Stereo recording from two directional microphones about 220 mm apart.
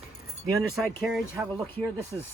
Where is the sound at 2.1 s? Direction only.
20° right (ahead or behind).